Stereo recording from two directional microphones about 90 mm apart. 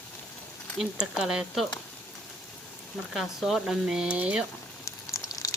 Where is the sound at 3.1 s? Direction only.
Centre (ahead or behind).